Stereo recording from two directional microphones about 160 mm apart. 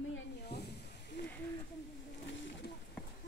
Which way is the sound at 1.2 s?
90° left.